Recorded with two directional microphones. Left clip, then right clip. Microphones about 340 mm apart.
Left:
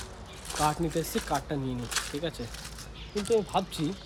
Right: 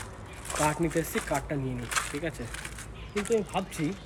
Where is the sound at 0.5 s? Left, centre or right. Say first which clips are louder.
Right 1 dB; centre.